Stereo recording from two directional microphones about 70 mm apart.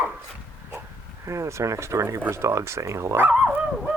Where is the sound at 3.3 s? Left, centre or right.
Centre.